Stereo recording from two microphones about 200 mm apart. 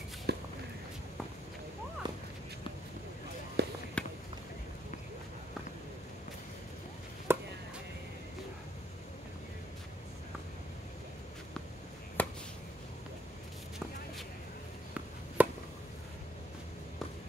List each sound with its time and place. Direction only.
0.3 s a sound: 55° right (ahead or behind)
2.0 s walk: 20° right (ahead or behind)
3.6 s basketball bounce: 55° right (ahead or behind)
4.0 s a sound: 5° left (ahead or behind)
7.3 s chopping: 10° right (ahead or behind)
12.2 s finger snapping: 5° left (ahead or behind)
15.4 s chop: 5° right (ahead or behind)